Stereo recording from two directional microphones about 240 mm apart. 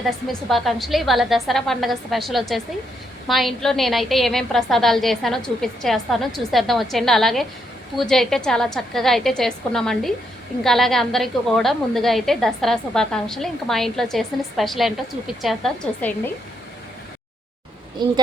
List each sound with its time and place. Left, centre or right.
0.5 s a woman's voice: centre
18.0 s a woman's voice: centre